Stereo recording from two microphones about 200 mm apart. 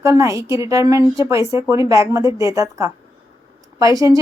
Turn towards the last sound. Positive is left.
turn(degrees=-15)  # may be behind; listen again after turning